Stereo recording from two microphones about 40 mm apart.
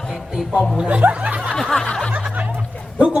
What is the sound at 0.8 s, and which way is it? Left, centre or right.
Speech, right.